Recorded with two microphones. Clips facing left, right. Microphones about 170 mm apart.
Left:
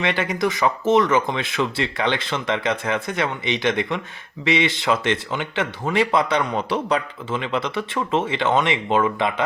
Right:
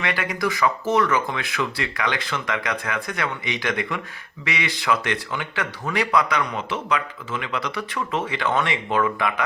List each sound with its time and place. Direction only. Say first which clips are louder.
0.0 s speech: left 3 dB; 25° left (ahead or behind)